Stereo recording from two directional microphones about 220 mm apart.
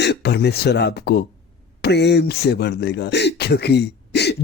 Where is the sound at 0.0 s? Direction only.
50° left (ahead or behind).